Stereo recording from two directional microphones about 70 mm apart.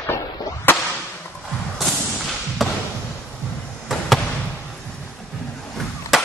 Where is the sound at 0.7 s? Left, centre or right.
Left.